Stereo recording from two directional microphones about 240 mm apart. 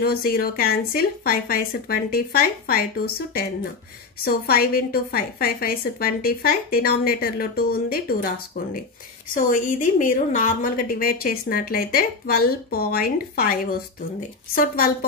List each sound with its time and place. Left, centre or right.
0.0 s a woman's voice: left
4.2 s a woman's voice: left
9.3 s a woman's voice: left